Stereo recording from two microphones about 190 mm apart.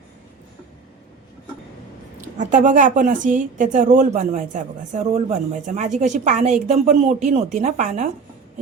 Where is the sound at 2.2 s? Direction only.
40° right (ahead or behind).